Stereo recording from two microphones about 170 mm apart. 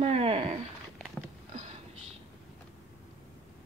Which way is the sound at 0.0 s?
35° right (ahead or behind).